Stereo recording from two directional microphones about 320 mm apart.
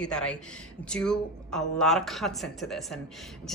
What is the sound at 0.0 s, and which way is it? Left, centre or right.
A woman's voice, centre.